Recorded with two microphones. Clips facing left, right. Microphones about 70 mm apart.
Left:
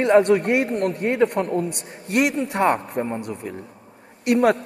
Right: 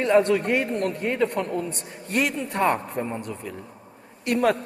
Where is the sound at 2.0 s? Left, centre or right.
Left.